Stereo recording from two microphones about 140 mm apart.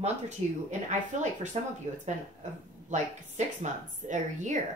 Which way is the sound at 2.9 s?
60° right (ahead or behind).